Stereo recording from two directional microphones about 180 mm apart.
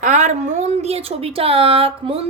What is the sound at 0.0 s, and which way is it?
A woman's voice, 45° right (ahead or behind).